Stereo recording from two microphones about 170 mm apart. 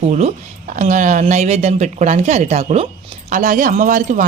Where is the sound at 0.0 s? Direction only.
40° right (ahead or behind).